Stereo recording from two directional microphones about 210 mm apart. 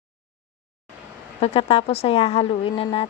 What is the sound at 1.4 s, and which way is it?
A woman's voice, 30° left (ahead or behind).